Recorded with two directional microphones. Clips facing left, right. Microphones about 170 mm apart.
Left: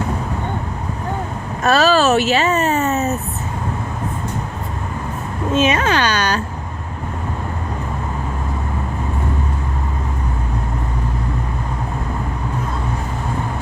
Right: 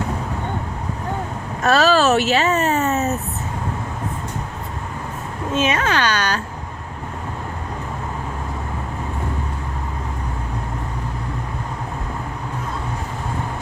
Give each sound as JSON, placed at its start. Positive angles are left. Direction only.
{"t": 1.6, "sound": "speech", "side_deg": 10}
{"t": 5.5, "sound": "speech", "side_deg": 20}